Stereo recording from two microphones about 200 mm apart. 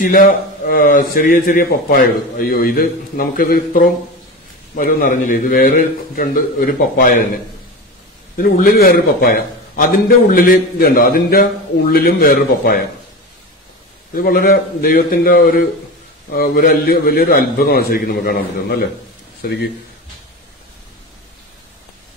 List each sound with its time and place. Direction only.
0.0 s a man's voice: 45° left (ahead or behind)
8.4 s a man's voice: 45° left (ahead or behind)
14.1 s a man's voice: 45° left (ahead or behind)